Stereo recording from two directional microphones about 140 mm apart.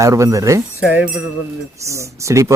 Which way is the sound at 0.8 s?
10° right (ahead or behind).